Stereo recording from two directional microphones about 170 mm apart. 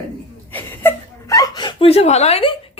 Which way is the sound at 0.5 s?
10° left (ahead or behind).